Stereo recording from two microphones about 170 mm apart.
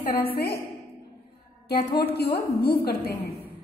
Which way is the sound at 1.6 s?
65° left (ahead or behind).